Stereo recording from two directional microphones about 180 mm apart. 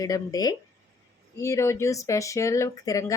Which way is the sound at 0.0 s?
20° left (ahead or behind).